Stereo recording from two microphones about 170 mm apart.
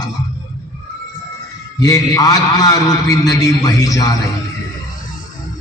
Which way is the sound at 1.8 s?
20° left (ahead or behind).